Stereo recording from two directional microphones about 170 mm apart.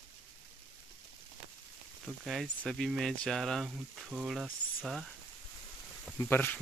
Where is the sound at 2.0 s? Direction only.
Centre (ahead or behind).